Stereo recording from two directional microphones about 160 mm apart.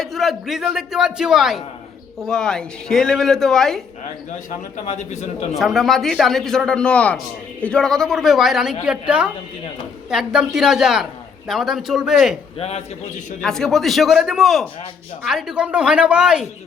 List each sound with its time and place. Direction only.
0.0 s a man's voice: centre (ahead or behind)
4.9 s speech: 45° left (ahead or behind)
5.5 s a man's voice: centre (ahead or behind)
12.5 s a man's voice: 40° left (ahead or behind)
13.4 s a man's voice: 5° left (ahead or behind)